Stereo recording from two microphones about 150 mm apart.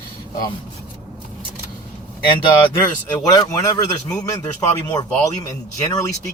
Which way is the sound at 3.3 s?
25° left (ahead or behind).